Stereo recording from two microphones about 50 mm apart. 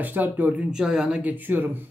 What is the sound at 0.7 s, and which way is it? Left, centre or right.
Speech, centre.